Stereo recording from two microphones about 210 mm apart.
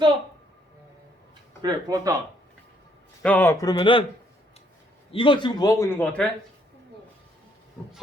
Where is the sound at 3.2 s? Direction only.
10° left (ahead or behind).